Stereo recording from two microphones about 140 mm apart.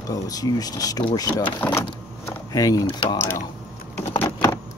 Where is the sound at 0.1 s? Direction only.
25° left (ahead or behind).